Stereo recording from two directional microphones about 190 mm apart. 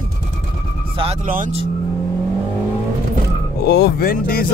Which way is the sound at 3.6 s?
60° left (ahead or behind).